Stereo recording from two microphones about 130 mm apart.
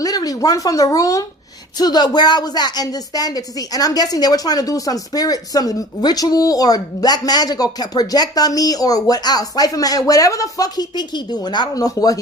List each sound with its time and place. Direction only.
0.0 s a woman's voice: 30° left (ahead or behind)